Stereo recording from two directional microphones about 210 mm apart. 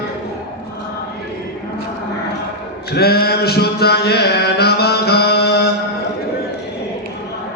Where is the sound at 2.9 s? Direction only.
50° left (ahead or behind).